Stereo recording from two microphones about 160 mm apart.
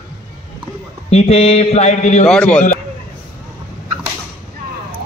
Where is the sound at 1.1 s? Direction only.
40° left (ahead or behind).